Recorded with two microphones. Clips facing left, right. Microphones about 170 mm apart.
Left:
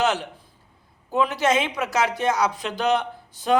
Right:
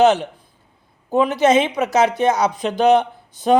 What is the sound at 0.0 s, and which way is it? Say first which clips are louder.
Speech: right 9 dB; 20° right (ahead or behind).